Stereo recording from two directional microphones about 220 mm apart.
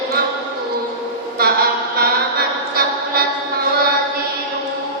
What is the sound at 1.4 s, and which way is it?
Chant, 45° right (ahead or behind).